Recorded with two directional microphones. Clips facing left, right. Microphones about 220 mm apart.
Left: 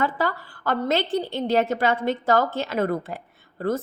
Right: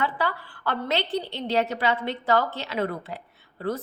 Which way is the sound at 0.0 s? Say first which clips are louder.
Left 3 dB; 45° left (ahead or behind).